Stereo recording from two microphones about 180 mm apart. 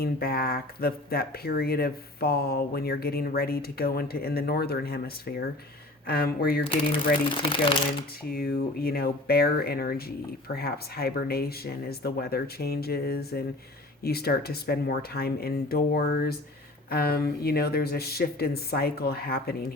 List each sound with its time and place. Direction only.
0.0 s speech: 60° left (ahead or behind)
7.5 s speech: 30° left (ahead or behind)
8.3 s speech: 60° left (ahead or behind)